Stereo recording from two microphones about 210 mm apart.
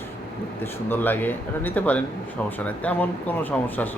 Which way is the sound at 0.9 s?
10° left (ahead or behind).